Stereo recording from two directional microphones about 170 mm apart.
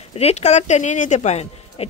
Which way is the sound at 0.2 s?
40° left (ahead or behind).